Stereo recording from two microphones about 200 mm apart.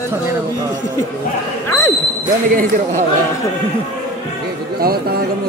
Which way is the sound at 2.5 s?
45° right (ahead or behind).